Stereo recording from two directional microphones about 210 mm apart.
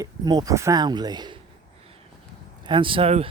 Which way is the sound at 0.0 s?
20° right (ahead or behind).